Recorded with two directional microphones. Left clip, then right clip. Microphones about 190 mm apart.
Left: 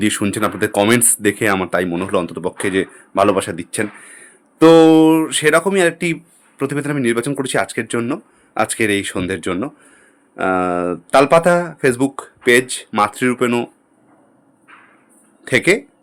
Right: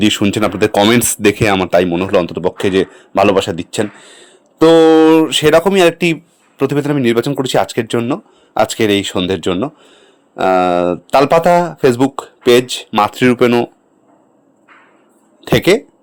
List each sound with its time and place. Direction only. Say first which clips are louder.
0.0 s speech: right 5 dB; 20° right (ahead or behind)
15.4 s speech: right 3 dB; 25° right (ahead or behind)